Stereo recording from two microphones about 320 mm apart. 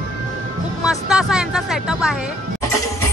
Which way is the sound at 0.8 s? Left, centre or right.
Centre.